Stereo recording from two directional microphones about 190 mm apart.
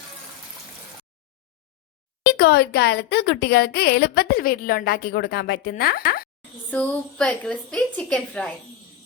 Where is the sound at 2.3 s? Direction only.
60° left (ahead or behind).